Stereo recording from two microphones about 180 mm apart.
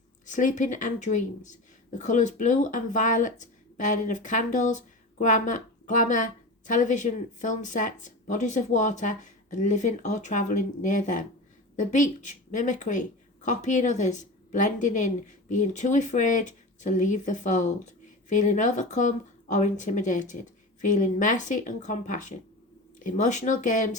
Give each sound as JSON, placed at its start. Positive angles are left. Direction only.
{"t": 0.3, "sound": "speech", "side_deg": 45}